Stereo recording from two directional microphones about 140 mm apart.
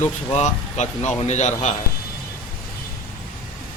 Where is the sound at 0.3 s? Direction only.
55° left (ahead or behind).